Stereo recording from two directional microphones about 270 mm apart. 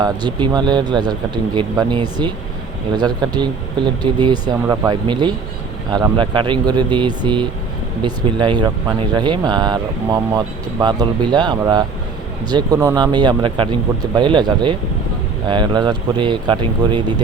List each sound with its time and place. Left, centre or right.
0.0 s speech: centre